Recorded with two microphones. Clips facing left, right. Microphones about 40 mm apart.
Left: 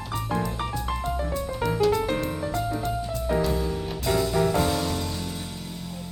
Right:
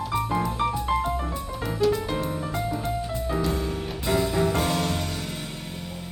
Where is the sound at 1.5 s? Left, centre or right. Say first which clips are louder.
Left 1 dB; centre.